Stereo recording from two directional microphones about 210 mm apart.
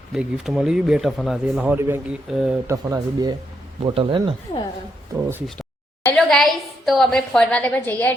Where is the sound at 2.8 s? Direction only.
15° right (ahead or behind).